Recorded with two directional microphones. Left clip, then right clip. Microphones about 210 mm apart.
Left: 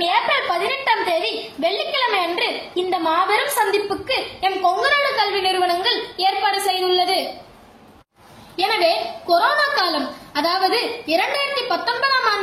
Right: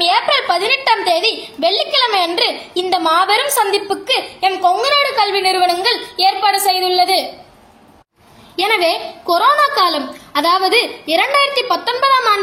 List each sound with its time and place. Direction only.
0.0 s a sound: 25° right (ahead or behind)
6.1 s a woman's voice: 20° right (ahead or behind)
8.5 s a child's voice: 35° right (ahead or behind)